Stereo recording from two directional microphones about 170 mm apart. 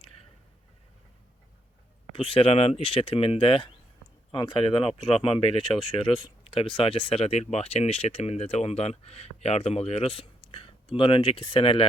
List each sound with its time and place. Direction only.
2.1 s speech: 35° left (ahead or behind)